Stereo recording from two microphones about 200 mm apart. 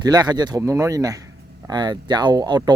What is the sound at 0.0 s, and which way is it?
Speech, 20° right (ahead or behind).